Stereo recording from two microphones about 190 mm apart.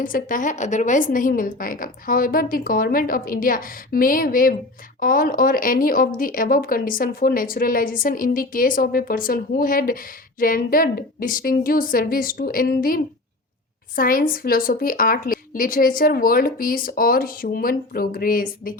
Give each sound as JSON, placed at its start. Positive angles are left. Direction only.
{"t": 0.0, "sound": "speech", "side_deg": 45}